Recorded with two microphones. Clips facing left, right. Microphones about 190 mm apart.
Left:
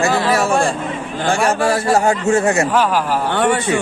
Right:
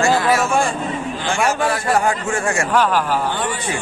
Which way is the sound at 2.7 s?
10° left (ahead or behind).